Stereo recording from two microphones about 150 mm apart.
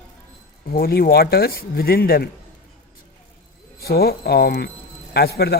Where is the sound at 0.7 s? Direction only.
90° left.